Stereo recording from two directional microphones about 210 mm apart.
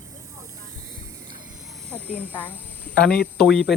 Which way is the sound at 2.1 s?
10° left (ahead or behind).